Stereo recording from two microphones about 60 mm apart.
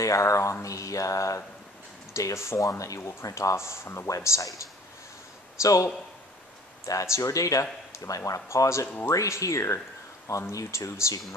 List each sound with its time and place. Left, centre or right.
0.0 s speech: left
3.0 s speech: left
4.1 s speech: left
5.6 s speech: left
6.9 s speech: left
9.1 s speech: left